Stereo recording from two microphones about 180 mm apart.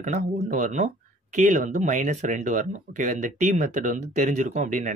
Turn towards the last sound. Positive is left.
turn(degrees=-40)  # may be behind; listen again after turning